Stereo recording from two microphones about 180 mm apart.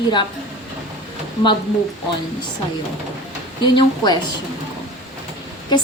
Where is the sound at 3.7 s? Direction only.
25° left (ahead or behind).